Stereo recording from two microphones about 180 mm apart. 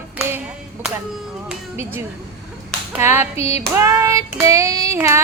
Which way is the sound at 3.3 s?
35° left (ahead or behind).